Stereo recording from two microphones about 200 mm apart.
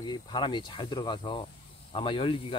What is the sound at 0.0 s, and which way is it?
Speech, 20° left (ahead or behind).